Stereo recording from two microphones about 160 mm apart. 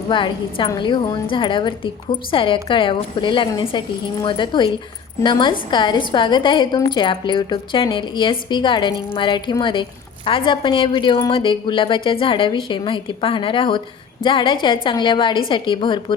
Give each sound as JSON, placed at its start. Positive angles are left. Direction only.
{"t": 0.1, "sound": "a woman's voice", "side_deg": 30}